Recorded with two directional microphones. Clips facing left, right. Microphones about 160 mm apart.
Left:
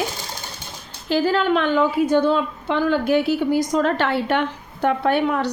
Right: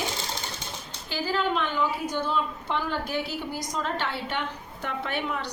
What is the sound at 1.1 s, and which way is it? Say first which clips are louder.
A woman's voice: left 9 dB; 70° left (ahead or behind).